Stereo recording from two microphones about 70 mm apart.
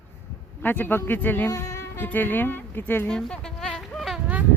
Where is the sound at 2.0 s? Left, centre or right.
Left.